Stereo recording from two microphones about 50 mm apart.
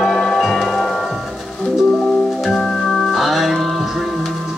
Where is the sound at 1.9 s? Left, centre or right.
Centre.